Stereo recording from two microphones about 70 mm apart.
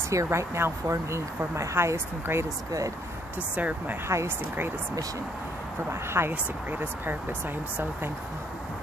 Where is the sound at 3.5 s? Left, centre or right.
Right.